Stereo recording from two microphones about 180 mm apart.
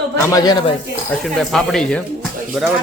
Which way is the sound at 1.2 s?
Centre (ahead or behind).